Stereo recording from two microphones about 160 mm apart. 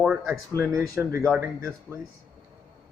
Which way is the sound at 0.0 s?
5° right (ahead or behind).